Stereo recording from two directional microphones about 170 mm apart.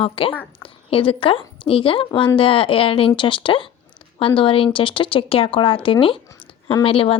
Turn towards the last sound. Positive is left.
turn(degrees=30)  # may be behind; listen again after turning